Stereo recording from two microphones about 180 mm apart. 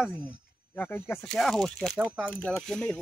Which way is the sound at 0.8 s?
10° left (ahead or behind).